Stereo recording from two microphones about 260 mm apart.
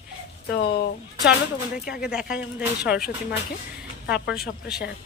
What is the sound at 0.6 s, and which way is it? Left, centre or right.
Speech, left.